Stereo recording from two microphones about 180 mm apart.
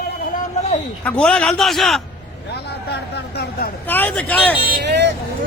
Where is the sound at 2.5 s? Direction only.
70° left (ahead or behind).